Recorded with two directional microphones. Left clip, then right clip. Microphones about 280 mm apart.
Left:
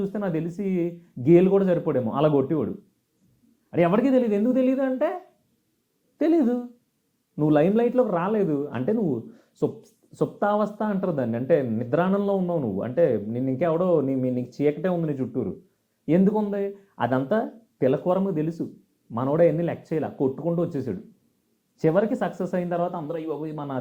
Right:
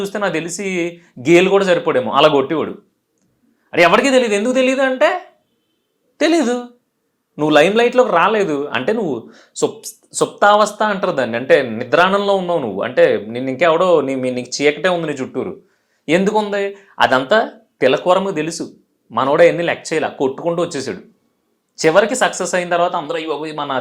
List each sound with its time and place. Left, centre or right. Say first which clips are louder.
0.0 s speech: right 9 dB; centre
9.0 s speech: right 6 dB; right
9.8 s speech: right 9 dB; centre